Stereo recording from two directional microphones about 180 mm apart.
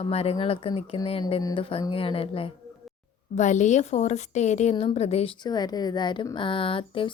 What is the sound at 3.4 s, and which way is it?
Speech, 40° left (ahead or behind).